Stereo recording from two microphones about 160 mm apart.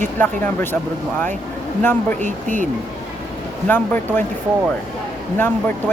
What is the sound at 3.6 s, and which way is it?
Speech, 10° left (ahead or behind).